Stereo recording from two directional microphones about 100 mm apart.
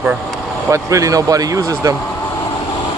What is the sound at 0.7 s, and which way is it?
Speech, 30° right (ahead or behind).